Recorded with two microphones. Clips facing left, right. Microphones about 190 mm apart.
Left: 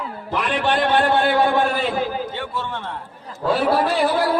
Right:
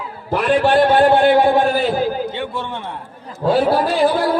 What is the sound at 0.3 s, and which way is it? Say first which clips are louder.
Speech: right 7 dB; 40° right (ahead or behind).